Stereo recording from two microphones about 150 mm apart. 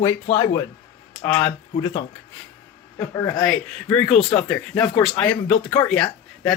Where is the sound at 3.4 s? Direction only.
5° left (ahead or behind).